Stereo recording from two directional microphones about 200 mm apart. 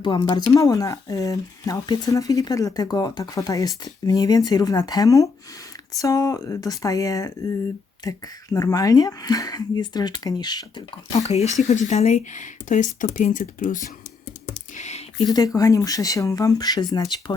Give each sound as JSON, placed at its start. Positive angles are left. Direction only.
{"t": 0.0, "sound": "speech", "side_deg": 20}
{"t": 11.3, "sound": "speech", "side_deg": 30}
{"t": 14.8, "sound": "a sound", "side_deg": 35}
{"t": 15.3, "sound": "speech", "side_deg": 20}